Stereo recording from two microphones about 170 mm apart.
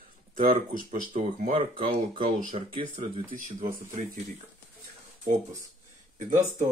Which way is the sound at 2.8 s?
45° right (ahead or behind).